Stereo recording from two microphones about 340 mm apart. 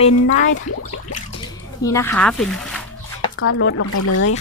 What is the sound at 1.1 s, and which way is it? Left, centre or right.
Speech, left.